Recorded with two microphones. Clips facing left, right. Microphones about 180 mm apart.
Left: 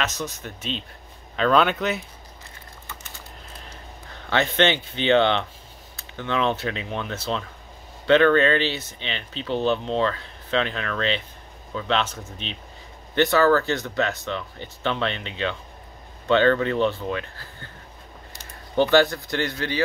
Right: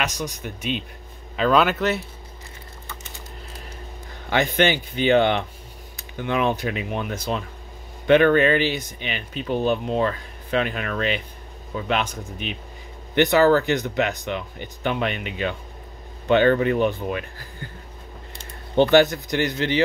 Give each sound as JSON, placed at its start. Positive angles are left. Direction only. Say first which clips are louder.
{"t": 0.0, "sound": "speech", "louder": "right 1 dB", "side_deg": -15}
{"t": 4.3, "sound": "speech", "louder": "right 1 dB", "side_deg": -10}